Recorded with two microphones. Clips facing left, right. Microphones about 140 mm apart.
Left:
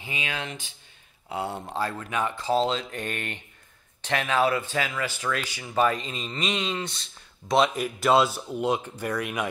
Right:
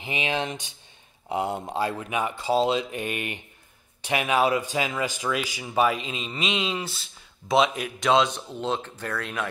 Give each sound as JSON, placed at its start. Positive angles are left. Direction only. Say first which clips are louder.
{"t": 0.0, "sound": "speech", "louder": "right 6 dB", "side_deg": -25}